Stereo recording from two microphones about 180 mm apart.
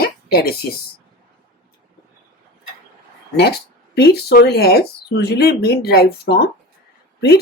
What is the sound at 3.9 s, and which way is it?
Speech, 60° left (ahead or behind).